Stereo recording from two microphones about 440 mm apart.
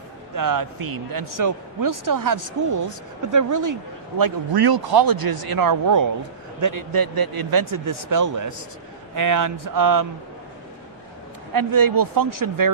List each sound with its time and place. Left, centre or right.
0.3 s speech: right
4.2 s speech: right
11.5 s speech: right